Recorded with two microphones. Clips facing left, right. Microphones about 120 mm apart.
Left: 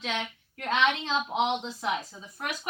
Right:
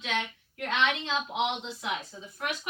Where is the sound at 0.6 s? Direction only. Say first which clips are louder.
Left 2 dB; 40° left (ahead or behind).